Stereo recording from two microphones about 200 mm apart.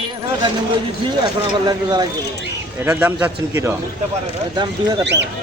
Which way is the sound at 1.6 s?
20° right (ahead or behind).